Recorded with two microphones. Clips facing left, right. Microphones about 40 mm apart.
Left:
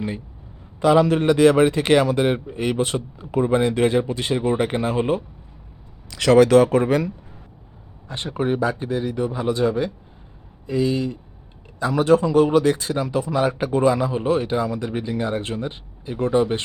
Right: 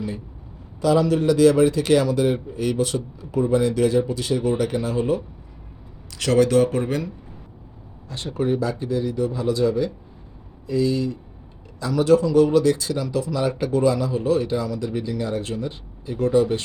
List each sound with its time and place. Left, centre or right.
0.8 s a man's voice: left
6.3 s speech: left
8.0 s a man's voice: left